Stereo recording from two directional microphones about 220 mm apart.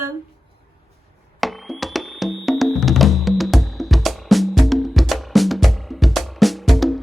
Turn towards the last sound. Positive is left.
turn(degrees=0)  # may be behind; listen again after turning